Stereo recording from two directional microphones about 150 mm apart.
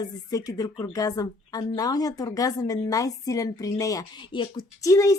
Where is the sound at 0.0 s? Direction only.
25° left (ahead or behind).